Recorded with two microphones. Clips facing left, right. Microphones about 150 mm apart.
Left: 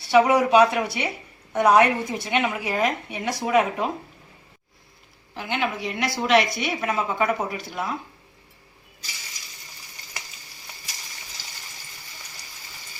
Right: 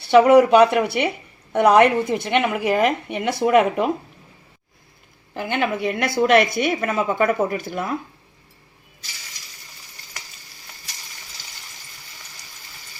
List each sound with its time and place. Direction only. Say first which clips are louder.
0.1 s a woman's voice: right 5 dB; 60° right (ahead or behind)
5.3 s a woman's voice: right 4 dB; 55° right (ahead or behind)